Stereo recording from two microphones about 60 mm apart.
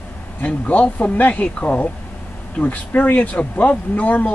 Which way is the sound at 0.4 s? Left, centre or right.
Left.